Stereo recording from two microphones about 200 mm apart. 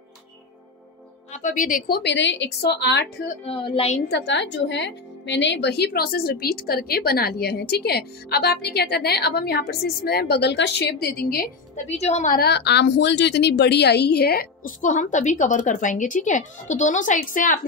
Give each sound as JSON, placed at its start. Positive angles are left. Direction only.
{"t": 1.3, "sound": "speech", "side_deg": 40}
{"t": 1.9, "sound": "a woman's voice", "side_deg": 55}
{"t": 3.4, "sound": "speech", "side_deg": 25}
{"t": 4.1, "sound": "a woman's voice", "side_deg": 60}